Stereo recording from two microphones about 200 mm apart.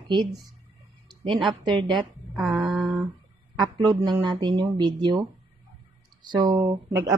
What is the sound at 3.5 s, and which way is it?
A woman's voice, 20° right (ahead or behind).